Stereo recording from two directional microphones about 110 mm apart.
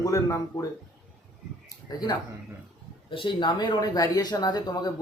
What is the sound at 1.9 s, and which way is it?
Speech, 35° left (ahead or behind).